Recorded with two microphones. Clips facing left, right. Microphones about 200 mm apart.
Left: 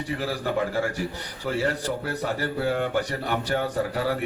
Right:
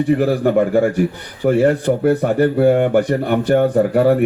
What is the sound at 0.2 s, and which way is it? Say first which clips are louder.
Speech: right 12 dB; 55° right (ahead or behind).